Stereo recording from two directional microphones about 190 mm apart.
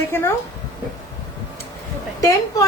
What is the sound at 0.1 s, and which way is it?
Speech, 15° left (ahead or behind).